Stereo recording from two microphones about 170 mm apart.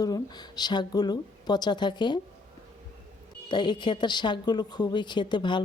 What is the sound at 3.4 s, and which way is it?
A woman's voice, 25° left (ahead or behind).